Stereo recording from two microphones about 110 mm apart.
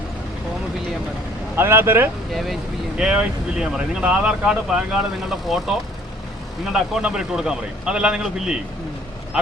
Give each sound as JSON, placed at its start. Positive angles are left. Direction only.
{"t": 1.5, "sound": "speech", "side_deg": -20}
{"t": 2.3, "sound": "speech", "side_deg": 0}
{"t": 6.7, "sound": "speech", "side_deg": -5}